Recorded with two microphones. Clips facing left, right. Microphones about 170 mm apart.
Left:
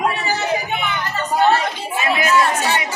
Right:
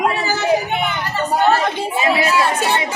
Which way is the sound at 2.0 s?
30° right (ahead or behind).